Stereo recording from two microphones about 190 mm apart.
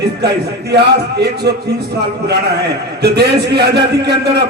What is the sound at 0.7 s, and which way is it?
A man's voice, 60° right (ahead or behind).